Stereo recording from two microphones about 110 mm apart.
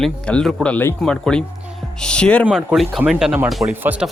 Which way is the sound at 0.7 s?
15° left (ahead or behind).